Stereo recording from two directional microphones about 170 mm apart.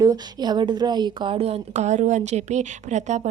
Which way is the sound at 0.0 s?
20° right (ahead or behind).